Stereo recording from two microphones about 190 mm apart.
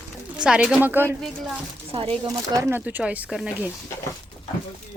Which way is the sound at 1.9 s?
30° right (ahead or behind).